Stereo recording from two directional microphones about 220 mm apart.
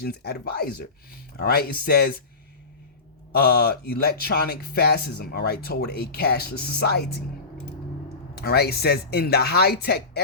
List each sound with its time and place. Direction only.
0.0 s speech: 45° left (ahead or behind)
3.3 s speech: 45° left (ahead or behind)
8.4 s speech: 45° left (ahead or behind)